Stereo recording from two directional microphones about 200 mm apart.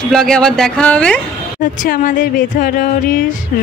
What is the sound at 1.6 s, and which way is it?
Speech, 40° left (ahead or behind).